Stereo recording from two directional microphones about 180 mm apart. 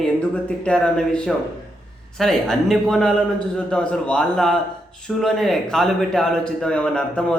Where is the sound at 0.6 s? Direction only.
5° left (ahead or behind).